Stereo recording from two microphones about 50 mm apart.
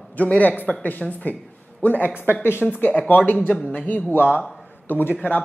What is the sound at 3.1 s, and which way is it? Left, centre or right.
Speech, left.